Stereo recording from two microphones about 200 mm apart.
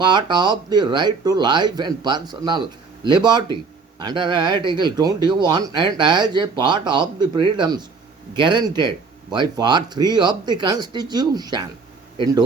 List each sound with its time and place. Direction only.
0.0 s speech: 20° right (ahead or behind)